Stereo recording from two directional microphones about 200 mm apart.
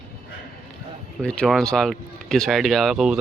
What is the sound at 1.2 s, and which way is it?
Speech, centre (ahead or behind).